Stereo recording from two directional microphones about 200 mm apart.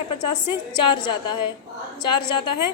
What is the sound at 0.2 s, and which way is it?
A woman's voice, 25° left (ahead or behind).